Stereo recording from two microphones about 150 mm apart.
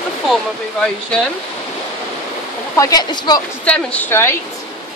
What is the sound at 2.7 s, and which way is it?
Speech, 25° left (ahead or behind).